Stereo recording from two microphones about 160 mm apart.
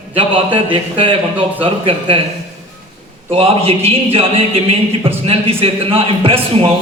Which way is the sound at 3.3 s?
35° right (ahead or behind).